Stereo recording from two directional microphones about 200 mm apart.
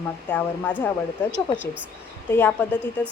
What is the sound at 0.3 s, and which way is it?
Speech, 10° left (ahead or behind).